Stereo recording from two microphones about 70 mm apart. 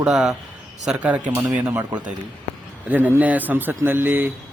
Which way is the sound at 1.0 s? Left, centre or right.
Right.